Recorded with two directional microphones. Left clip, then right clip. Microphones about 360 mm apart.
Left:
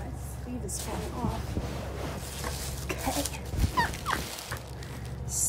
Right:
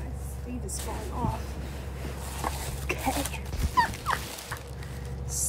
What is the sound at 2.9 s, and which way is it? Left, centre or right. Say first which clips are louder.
Dog: right 2 dB; centre.